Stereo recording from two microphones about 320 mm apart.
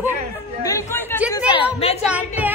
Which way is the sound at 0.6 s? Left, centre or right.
Centre.